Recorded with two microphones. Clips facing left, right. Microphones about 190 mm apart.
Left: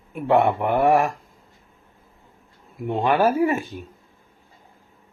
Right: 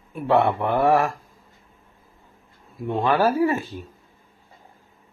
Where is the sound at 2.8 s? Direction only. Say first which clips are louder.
Left 1 dB; 20° left (ahead or behind).